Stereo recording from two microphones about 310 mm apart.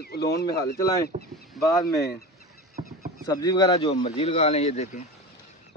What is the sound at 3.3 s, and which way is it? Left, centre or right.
A man's voice, centre.